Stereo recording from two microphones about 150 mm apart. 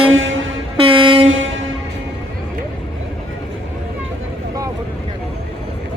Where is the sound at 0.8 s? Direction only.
35° right (ahead or behind).